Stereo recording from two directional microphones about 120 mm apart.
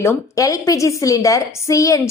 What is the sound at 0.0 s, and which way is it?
A woman's voice, 25° left (ahead or behind).